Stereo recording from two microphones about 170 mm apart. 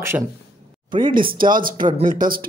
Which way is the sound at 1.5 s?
55° right (ahead or behind).